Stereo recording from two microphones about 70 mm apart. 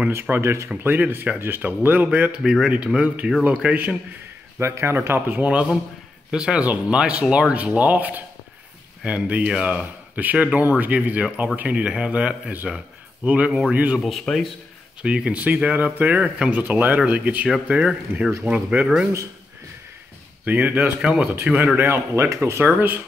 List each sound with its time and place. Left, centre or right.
0.1 s speech: right
0.8 s speech: right
2.4 s speech: centre
2.9 s speech: centre
4.6 s speech: right; by 14.0 s centre
14.0 s speech: centre
15.0 s speech: centre
20.4 s speech: right
21.7 s speech: right